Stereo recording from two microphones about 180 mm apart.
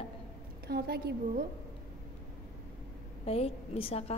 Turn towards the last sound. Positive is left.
turn(degrees=35)  # may be behind; listen again after turning